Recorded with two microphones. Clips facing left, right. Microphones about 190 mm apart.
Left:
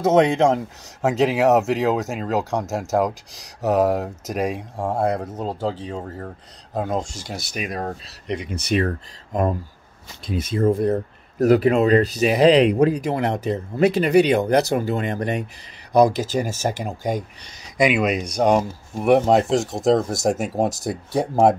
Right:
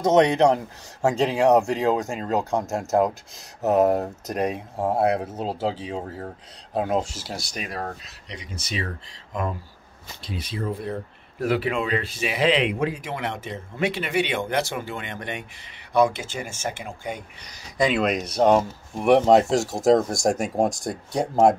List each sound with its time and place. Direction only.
0.2 s speech: 25° left (ahead or behind)
1.0 s speech: 5° left (ahead or behind)
6.7 s speech: 10° right (ahead or behind)
7.6 s speech: 20° left (ahead or behind)
8.3 s speech: 60° left (ahead or behind); by 17.2 s 40° left (ahead or behind)
17.7 s speech: 10° left (ahead or behind)